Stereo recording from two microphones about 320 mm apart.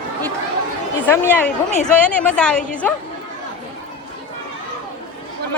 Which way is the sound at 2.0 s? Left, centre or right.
Centre.